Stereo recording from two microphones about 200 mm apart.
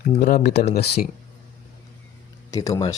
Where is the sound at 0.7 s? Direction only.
50° left (ahead or behind).